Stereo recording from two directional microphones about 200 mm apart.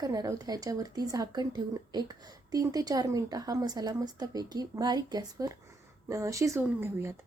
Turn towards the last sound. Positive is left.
turn(degrees=-10)  # may be behind; listen again after turning